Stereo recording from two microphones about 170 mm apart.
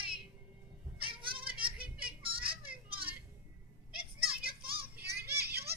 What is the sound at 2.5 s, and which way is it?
Children playing, 60° right (ahead or behind).